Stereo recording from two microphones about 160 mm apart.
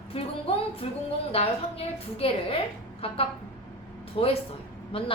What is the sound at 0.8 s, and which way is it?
A woman's voice, 35° left (ahead or behind).